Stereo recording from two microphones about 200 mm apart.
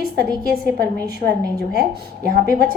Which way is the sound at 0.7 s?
50° right (ahead or behind).